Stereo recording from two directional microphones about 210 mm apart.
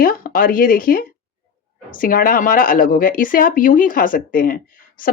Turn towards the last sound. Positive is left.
turn(degrees=40)  # may be behind; listen again after turning